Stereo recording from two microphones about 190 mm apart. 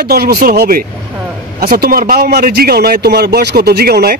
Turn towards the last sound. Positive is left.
turn(degrees=-55)  # may be behind; listen again after turning